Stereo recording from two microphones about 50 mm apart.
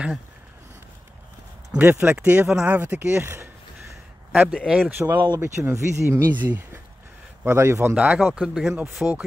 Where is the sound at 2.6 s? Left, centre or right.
Right.